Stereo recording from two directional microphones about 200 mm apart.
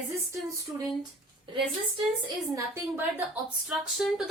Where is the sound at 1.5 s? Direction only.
25° right (ahead or behind).